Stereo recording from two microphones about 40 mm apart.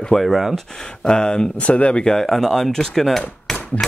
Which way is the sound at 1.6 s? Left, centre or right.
Left.